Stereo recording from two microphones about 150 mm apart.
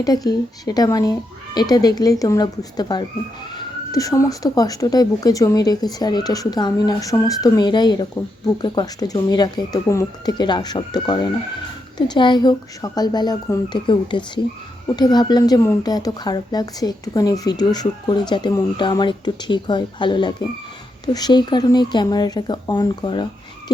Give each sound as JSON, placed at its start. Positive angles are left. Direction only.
{"t": 0.0, "sound": "speech", "side_deg": 25}